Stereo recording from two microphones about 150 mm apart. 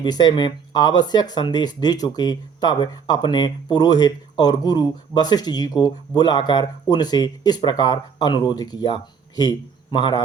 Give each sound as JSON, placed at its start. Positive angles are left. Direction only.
{"t": 0.0, "sound": "speech", "side_deg": 30}